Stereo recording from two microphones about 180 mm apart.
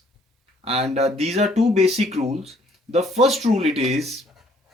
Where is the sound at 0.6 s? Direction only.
35° right (ahead or behind).